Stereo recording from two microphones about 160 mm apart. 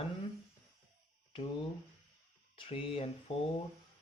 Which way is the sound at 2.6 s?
35° left (ahead or behind).